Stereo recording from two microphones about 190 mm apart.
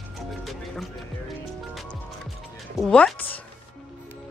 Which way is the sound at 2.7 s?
5° left (ahead or behind).